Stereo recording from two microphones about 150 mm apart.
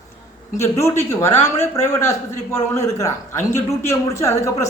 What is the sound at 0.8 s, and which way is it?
A man's voice, 20° left (ahead or behind).